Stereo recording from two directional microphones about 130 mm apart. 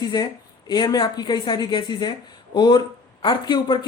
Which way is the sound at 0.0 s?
30° left (ahead or behind).